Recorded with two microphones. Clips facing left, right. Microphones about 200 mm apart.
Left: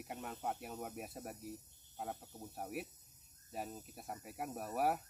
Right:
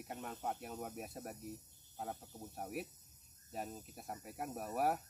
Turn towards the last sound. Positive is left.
turn(degrees=0)  # may be behind; listen again after turning